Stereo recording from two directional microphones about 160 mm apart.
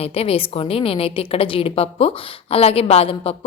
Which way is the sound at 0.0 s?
40° left (ahead or behind).